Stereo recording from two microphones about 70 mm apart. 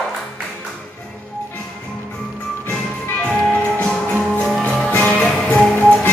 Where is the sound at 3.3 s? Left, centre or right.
Centre.